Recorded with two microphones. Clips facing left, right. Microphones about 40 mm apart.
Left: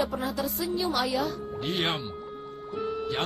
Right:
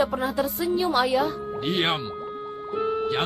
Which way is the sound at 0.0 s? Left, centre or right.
Right.